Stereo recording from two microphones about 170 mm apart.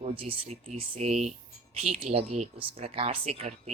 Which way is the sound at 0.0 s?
35° right (ahead or behind).